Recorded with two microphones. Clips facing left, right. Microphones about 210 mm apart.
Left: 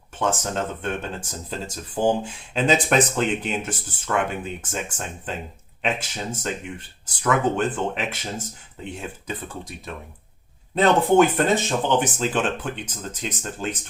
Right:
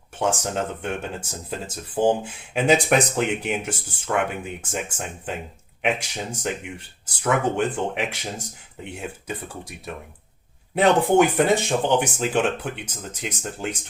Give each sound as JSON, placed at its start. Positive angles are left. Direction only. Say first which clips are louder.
{"t": 0.2, "sound": "speech", "louder": "right 1 dB", "side_deg": -10}
{"t": 10.8, "sound": "speech", "louder": "even", "side_deg": -15}